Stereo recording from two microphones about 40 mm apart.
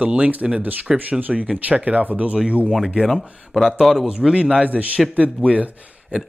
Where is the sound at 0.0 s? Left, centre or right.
Right.